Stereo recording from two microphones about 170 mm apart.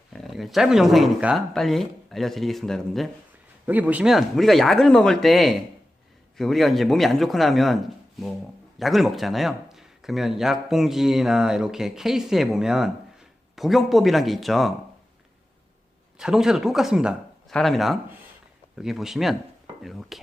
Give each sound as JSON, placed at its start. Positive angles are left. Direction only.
{"t": 0.1, "sound": "speech", "side_deg": 0}
{"t": 3.7, "sound": "speech", "side_deg": -10}
{"t": 16.1, "sound": "speech", "side_deg": -5}